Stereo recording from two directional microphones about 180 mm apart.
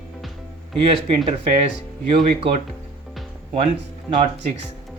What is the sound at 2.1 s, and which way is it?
Speech, 30° right (ahead or behind).